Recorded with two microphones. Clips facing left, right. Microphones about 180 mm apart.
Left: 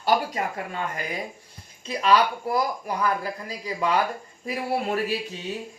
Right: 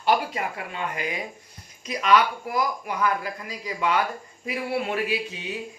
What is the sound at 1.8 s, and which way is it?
A man's voice, 30° left (ahead or behind).